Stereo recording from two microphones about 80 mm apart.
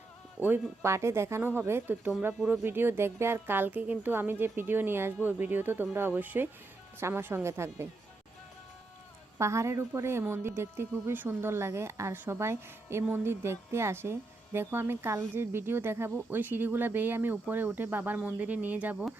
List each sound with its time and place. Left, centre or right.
0.3 s a woman's voice: right
1.4 s a woman's voice: right
9.4 s a woman's voice: right